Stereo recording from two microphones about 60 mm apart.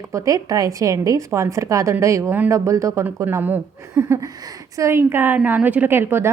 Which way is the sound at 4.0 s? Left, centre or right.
Right.